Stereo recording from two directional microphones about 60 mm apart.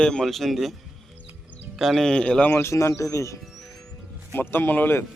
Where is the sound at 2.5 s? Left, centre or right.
Left.